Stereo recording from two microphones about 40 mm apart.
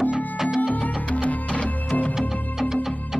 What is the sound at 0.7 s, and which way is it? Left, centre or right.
Music, left.